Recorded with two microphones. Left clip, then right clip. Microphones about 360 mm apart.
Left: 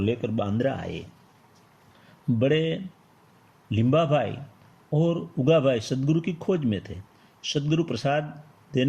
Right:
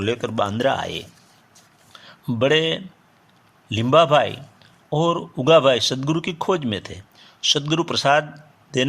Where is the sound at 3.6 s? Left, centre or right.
Centre.